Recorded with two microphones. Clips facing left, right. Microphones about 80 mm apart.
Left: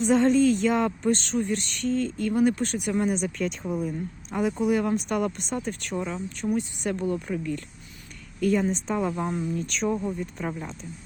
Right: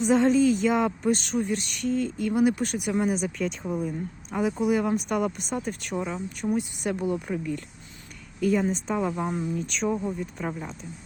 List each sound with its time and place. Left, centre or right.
0.0 s a woman's voice: centre
5.5 s a woman's voice: centre
8.4 s speech: centre
9.2 s a woman's voice: centre
9.6 s speech: centre